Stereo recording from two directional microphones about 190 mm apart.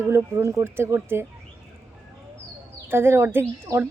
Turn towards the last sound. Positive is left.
turn(degrees=-10)  # may be behind; listen again after turning